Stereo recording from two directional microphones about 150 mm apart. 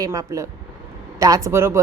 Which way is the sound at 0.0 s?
20° right (ahead or behind).